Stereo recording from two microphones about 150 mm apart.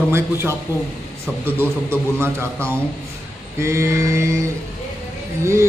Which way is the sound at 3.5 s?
20° right (ahead or behind).